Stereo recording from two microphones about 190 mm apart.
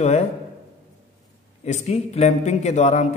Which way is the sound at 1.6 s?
35° left (ahead or behind).